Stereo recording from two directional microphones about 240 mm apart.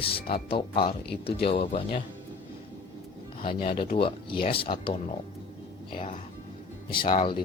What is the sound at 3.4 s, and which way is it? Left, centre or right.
Speech, left.